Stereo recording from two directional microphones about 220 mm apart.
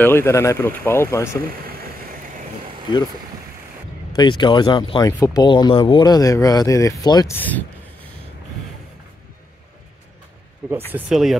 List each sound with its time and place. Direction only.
0.0 s speech: 10° left (ahead or behind)
1.5 s vehicle: 40° right (ahead or behind)
4.1 s speech: 20° left (ahead or behind)
10.9 s speech: 5° right (ahead or behind)